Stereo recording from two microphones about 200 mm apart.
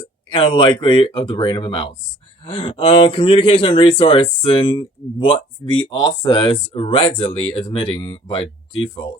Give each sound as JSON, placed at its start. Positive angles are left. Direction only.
{"t": 0.3, "sound": "speech", "side_deg": 25}